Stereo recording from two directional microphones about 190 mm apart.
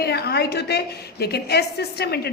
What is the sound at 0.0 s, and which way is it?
A woman's voice, 55° left (ahead or behind).